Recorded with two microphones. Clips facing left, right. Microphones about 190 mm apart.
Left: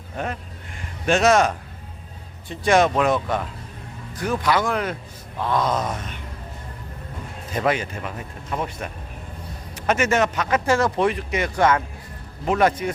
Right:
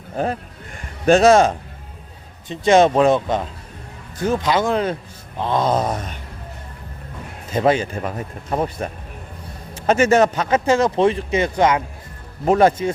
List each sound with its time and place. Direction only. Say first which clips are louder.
0.2 s speech: right 6 dB; 35° right (ahead or behind)
7.5 s speech: right 5 dB; 30° right (ahead or behind)
12.5 s speech: right 5 dB; 30° right (ahead or behind)